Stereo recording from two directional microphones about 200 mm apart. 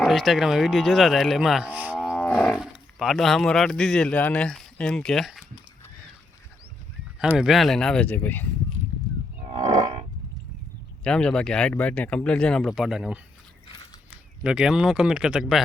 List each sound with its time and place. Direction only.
0.0 s speech: centre (ahead or behind)
7.3 s speech: centre (ahead or behind)
9.1 s cattle: 20° right (ahead or behind)
9.5 s roaring cats: 30° right (ahead or behind)
11.0 s speech: 5° left (ahead or behind)